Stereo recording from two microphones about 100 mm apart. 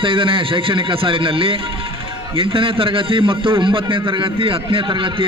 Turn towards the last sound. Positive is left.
turn(degrees=-55)  # may be behind; listen again after turning